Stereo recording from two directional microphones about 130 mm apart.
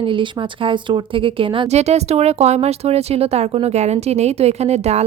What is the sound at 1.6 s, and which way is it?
Speech, 55° right (ahead or behind).